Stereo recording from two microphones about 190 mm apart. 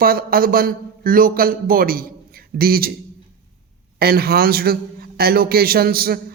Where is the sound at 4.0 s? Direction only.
55° right (ahead or behind).